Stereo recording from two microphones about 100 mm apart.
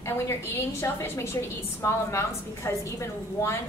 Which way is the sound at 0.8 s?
25° left (ahead or behind).